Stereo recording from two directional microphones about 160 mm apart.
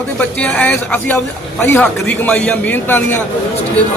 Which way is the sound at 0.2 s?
10° left (ahead or behind).